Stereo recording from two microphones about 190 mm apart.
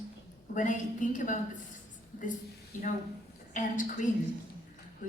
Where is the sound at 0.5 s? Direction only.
40° left (ahead or behind).